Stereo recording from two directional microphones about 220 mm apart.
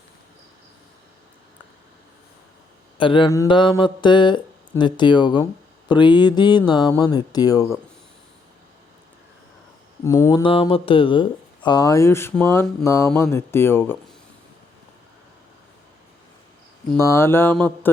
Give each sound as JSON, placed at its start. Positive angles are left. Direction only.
{"t": 3.0, "sound": "speech", "side_deg": 20}
{"t": 10.0, "sound": "speech", "side_deg": 15}
{"t": 16.9, "sound": "speech", "side_deg": 10}